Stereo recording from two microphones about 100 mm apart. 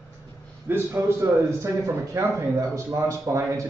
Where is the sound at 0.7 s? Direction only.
20° right (ahead or behind).